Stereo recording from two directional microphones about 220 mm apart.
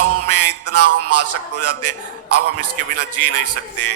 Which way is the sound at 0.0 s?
90° right.